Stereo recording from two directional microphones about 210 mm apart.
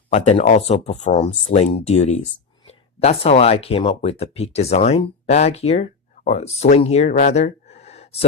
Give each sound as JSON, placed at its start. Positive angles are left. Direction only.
{"t": 0.1, "sound": "speech", "side_deg": 30}